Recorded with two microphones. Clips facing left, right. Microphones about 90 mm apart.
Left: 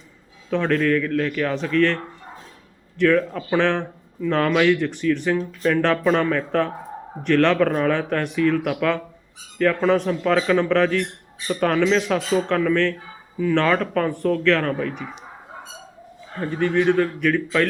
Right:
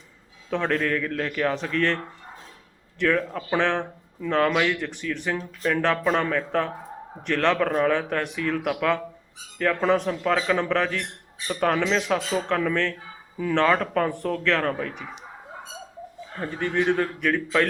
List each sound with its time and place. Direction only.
0.5 s speech: 25° right (ahead or behind)
3.0 s speech: 20° right (ahead or behind)
16.4 s speech: 25° right (ahead or behind)